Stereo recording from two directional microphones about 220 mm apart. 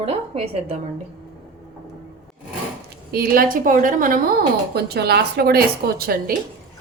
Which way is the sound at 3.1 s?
40° right (ahead or behind).